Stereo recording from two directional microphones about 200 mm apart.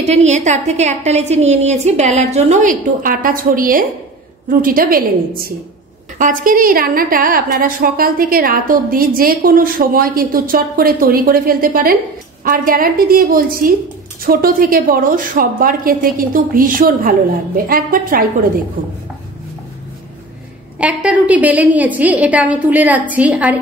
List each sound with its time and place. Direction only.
0.1 s a woman's voice: 35° right (ahead or behind)
20.8 s a woman's voice: 5° right (ahead or behind)